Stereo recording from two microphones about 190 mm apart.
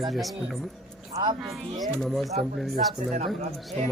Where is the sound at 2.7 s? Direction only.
40° right (ahead or behind).